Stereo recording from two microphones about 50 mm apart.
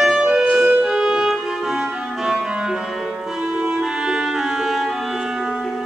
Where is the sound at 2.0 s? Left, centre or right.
Centre.